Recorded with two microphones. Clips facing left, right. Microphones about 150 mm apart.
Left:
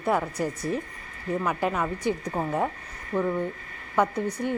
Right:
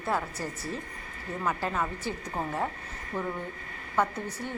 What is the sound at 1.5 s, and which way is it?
A woman's voice, 15° left (ahead or behind).